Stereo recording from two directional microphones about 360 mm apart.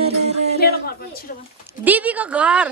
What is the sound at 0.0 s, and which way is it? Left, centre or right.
Music, centre.